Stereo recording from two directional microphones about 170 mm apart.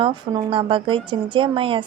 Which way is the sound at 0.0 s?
30° right (ahead or behind).